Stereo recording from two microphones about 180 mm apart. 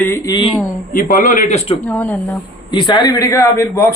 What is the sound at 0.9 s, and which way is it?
Speech, 50° left (ahead or behind).